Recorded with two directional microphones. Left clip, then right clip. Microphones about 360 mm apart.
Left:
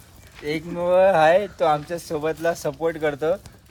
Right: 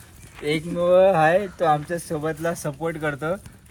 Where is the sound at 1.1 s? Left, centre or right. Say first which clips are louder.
Left 2 dB; left.